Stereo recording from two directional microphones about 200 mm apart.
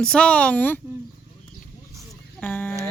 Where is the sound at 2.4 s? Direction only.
10° left (ahead or behind).